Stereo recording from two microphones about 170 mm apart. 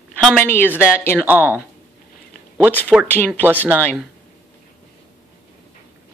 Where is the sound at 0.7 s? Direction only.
15° left (ahead or behind).